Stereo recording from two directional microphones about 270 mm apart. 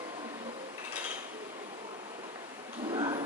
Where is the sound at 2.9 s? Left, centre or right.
Centre.